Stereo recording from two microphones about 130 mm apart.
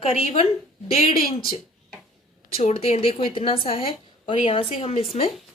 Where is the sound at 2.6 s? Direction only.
50° left (ahead or behind).